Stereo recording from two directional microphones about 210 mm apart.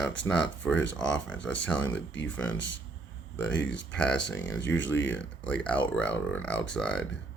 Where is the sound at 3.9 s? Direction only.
5° left (ahead or behind).